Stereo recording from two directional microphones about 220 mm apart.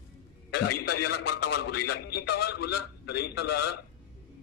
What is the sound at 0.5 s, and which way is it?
Speech, 90° left.